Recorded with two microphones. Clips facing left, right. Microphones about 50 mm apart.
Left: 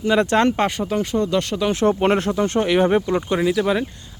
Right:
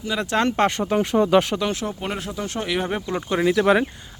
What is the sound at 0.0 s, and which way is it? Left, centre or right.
Speech, left.